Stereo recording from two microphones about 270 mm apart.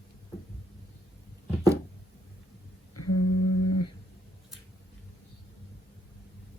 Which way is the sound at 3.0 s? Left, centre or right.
Left.